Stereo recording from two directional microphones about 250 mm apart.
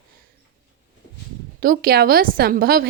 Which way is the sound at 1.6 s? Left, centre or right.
Right.